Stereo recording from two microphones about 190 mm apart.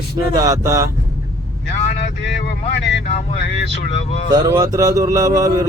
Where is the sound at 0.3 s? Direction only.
15° right (ahead or behind).